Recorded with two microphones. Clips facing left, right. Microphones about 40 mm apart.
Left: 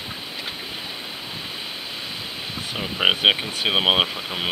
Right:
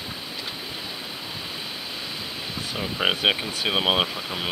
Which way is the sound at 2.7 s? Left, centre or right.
Centre.